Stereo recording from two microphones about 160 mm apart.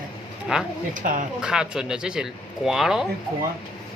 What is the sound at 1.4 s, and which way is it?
Speech, 5° right (ahead or behind).